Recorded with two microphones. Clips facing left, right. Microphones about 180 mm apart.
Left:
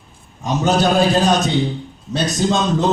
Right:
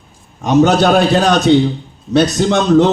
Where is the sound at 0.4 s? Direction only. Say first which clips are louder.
Right 6 dB; 70° right (ahead or behind).